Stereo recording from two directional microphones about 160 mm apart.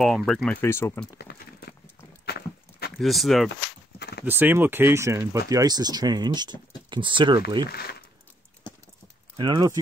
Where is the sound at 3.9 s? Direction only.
90° left.